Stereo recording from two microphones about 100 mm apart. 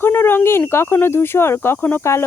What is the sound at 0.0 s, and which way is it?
Speech, 20° left (ahead or behind).